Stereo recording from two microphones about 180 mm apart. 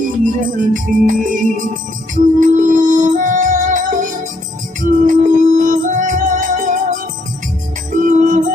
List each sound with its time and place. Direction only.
0.5 s music: 45° right (ahead or behind)